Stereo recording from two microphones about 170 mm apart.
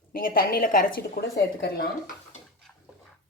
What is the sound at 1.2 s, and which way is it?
Speech, 70° left (ahead or behind).